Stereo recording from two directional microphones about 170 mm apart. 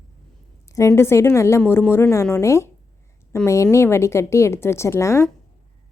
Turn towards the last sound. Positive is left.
turn(degrees=15)  # may be behind; listen again after turning